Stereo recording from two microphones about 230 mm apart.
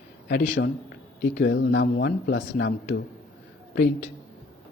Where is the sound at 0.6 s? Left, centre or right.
Left.